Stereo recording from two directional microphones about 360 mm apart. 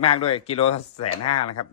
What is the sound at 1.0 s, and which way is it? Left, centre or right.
Speech, left.